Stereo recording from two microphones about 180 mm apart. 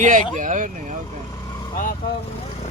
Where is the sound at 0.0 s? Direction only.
45° right (ahead or behind).